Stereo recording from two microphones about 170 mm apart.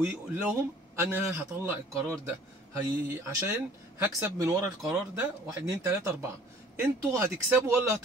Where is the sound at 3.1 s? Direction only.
15° right (ahead or behind).